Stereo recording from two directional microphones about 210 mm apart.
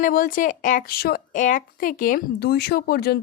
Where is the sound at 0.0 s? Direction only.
40° left (ahead or behind).